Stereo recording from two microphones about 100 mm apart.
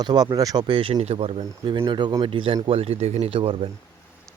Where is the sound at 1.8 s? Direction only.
50° right (ahead or behind).